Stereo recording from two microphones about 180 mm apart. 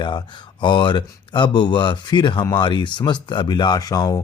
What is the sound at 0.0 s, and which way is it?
Speech, 25° left (ahead or behind).